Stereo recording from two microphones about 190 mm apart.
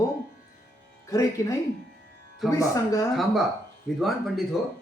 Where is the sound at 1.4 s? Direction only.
15° left (ahead or behind).